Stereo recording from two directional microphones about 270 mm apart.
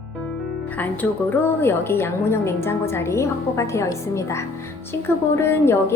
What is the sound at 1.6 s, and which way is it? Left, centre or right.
A woman's voice, centre.